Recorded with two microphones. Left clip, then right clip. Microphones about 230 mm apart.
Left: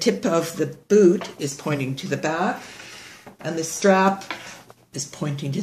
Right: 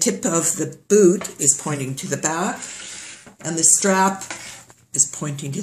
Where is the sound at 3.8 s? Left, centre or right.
Centre.